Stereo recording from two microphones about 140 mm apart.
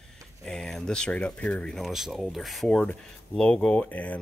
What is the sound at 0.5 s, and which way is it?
Speech, 5° left (ahead or behind).